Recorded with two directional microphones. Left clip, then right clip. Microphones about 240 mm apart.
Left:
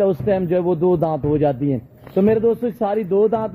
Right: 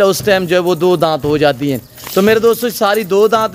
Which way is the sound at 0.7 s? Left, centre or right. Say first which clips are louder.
Right 3 dB; right.